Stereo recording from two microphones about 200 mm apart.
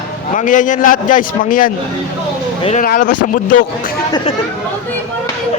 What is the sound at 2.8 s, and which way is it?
Speech, 45° left (ahead or behind).